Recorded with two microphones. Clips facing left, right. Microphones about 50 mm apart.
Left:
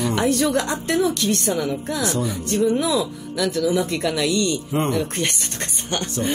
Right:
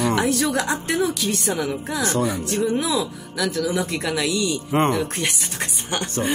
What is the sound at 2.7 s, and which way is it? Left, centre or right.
Speech, centre.